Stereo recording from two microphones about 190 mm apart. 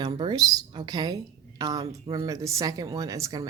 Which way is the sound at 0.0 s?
25° right (ahead or behind).